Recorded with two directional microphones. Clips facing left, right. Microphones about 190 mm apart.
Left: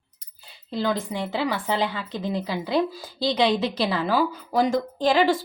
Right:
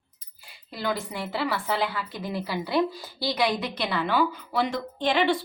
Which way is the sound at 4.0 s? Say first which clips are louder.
Left 2 dB; 35° left (ahead or behind).